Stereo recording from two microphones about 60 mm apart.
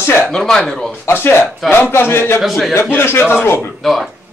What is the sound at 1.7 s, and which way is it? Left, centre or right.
Speech, left.